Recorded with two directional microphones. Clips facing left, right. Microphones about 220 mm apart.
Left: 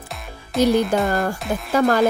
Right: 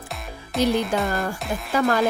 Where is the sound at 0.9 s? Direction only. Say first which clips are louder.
Left 4 dB; 45° left (ahead or behind).